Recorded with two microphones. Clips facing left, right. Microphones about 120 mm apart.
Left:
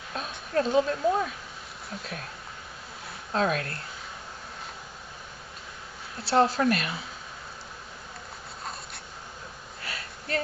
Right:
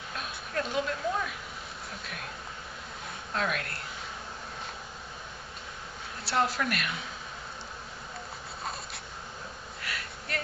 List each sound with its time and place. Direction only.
0.2 s a woman's voice: 35° left (ahead or behind)
3.3 s speech: 35° left (ahead or behind)
6.3 s speech: 35° left (ahead or behind)
9.8 s a sound: 30° left (ahead or behind)